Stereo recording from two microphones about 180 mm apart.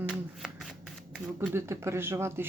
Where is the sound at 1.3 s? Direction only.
15° right (ahead or behind).